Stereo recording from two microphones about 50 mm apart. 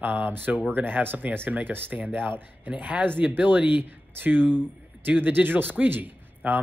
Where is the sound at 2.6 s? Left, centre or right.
Right.